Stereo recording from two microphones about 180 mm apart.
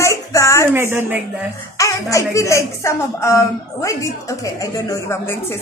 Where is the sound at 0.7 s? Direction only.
15° right (ahead or behind).